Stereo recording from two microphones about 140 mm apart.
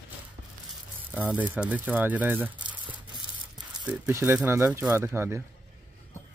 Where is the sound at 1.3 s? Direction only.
10° right (ahead or behind).